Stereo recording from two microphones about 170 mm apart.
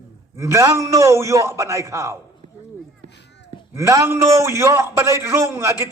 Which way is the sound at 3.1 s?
90° left.